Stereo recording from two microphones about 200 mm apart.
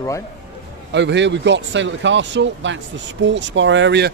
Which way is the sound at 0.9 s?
60° right (ahead or behind).